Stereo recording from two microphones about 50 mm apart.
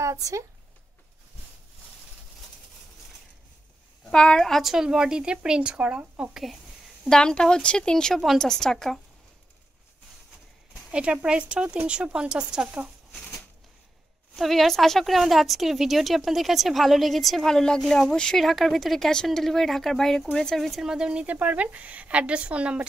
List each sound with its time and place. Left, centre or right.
0.0 s speech: right
4.1 s a woman's voice: centre
4.5 s speech: centre
4.7 s a woman's voice: centre
7.1 s a woman's voice: centre
10.9 s a woman's voice: right
14.3 s a woman's voice: centre
18.4 s speech: centre
20.8 s a woman's voice: centre